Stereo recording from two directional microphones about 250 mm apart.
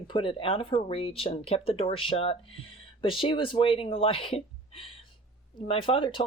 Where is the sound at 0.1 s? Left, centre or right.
Left.